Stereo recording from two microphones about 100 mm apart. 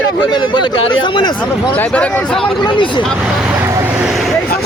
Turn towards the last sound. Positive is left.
turn(degrees=50)  # may be behind; listen again after turning